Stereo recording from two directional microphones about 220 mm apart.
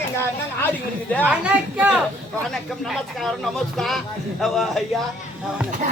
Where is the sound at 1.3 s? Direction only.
5° right (ahead or behind).